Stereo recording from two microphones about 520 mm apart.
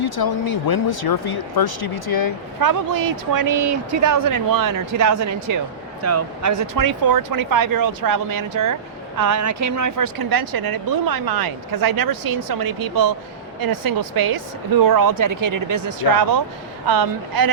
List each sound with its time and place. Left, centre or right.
0.0 s speech: left
2.6 s speech: right